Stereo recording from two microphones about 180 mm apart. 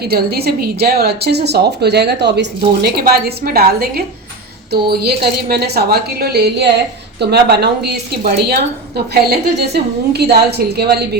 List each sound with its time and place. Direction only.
0.0 s a woman's voice: 60° right (ahead or behind)